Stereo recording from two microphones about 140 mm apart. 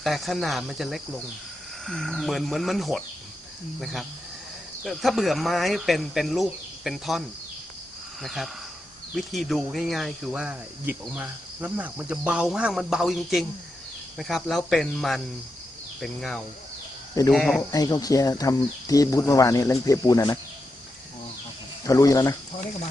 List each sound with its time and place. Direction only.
0.0 s speech: centre (ahead or behind)
4.8 s speech: centre (ahead or behind)
11.1 s cricket: 10° right (ahead or behind)
14.2 s speech: centre (ahead or behind)
17.6 s speech: 25° left (ahead or behind)
21.8 s speech: 25° left (ahead or behind)